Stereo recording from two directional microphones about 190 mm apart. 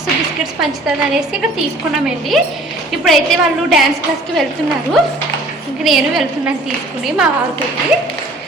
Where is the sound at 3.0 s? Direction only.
Centre (ahead or behind).